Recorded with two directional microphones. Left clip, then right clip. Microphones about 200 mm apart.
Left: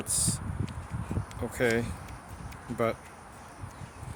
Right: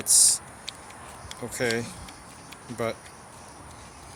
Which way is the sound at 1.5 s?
25° left (ahead or behind).